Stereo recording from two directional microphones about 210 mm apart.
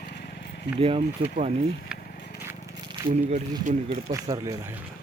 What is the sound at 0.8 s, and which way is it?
Speech, 25° right (ahead or behind).